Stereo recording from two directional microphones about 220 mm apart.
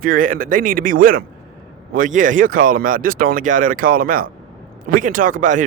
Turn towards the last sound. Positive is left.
turn(degrees=-35)  # may be behind; listen again after turning